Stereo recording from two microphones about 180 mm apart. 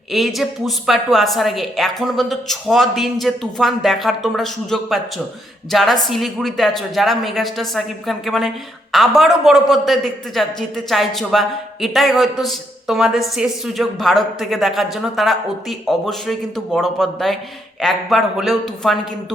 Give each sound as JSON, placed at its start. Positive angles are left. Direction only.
{"t": 0.1, "sound": "a woman's voice", "side_deg": 0}